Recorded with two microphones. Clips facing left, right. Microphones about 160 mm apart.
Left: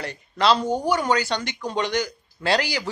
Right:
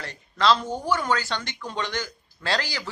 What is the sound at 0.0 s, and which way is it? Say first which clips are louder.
Speech: left 2 dB; 10° left (ahead or behind).